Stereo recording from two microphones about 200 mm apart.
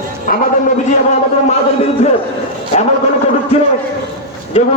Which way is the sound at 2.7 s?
30° left (ahead or behind).